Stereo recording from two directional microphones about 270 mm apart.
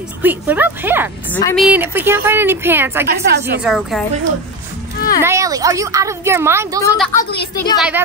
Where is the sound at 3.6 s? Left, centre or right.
Centre.